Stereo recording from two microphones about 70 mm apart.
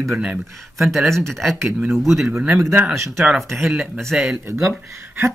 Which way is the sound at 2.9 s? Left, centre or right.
Right.